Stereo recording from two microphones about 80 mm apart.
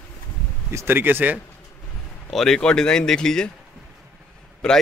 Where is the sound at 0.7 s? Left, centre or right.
Right.